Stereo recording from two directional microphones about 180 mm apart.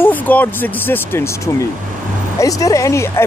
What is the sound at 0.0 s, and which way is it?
Speech, 10° left (ahead or behind).